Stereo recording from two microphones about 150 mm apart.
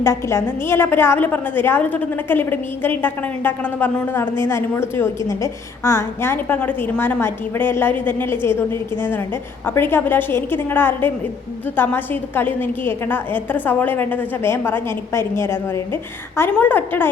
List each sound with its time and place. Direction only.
0.0 s a woman's voice: 20° left (ahead or behind)